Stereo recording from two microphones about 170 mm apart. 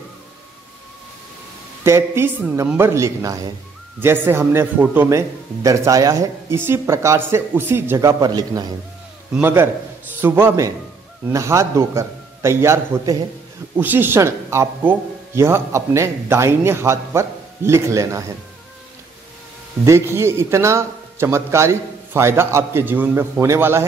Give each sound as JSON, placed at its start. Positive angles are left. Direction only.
{"t": 1.9, "sound": "a man's voice", "side_deg": -15}
{"t": 19.8, "sound": "a man's voice", "side_deg": -15}